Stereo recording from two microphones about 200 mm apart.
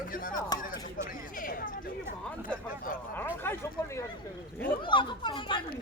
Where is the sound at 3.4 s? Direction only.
10° left (ahead or behind).